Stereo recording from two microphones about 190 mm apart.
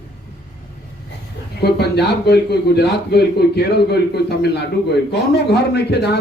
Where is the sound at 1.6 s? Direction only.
60° left (ahead or behind).